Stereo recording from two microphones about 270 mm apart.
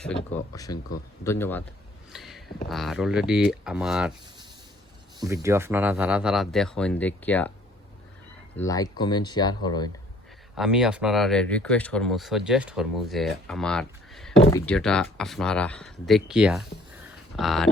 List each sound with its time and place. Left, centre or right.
0.2 s speech: centre
2.1 s a sound: centre
2.6 s speech: centre
5.2 s speech: centre
8.5 s speech: centre
10.6 s speech: centre
14.3 s speech: left
14.7 s speech: centre